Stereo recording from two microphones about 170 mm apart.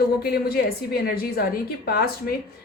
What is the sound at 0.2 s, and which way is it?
Speech, 65° left (ahead or behind).